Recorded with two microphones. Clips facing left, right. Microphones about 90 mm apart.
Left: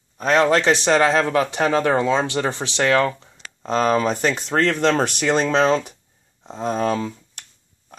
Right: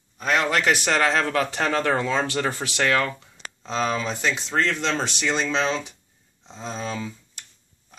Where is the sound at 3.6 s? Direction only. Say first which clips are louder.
Left 7 dB; 45° left (ahead or behind).